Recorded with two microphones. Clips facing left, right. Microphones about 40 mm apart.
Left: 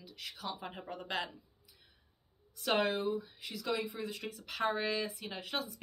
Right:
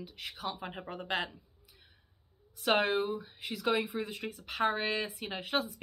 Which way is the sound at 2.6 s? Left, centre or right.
Right.